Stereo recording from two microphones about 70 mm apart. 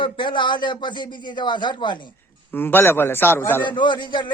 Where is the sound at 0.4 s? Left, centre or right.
Left.